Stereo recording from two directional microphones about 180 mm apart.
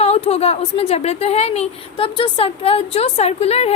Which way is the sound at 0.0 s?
35° left (ahead or behind).